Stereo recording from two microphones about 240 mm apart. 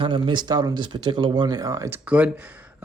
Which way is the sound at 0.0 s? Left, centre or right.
Centre.